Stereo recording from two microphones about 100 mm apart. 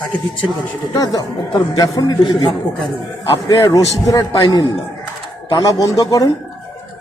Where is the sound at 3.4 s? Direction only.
40° left (ahead or behind).